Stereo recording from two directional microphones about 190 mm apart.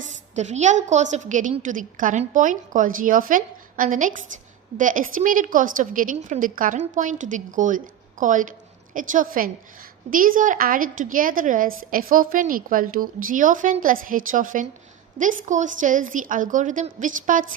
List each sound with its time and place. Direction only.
0.3 s a woman's voice: 40° right (ahead or behind)